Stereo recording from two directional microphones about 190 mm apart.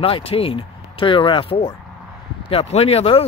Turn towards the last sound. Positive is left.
turn(degrees=30)  # may be behind; listen again after turning